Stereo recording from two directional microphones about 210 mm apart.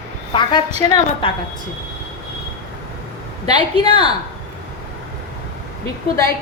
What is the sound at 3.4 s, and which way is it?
Speech, 20° left (ahead or behind).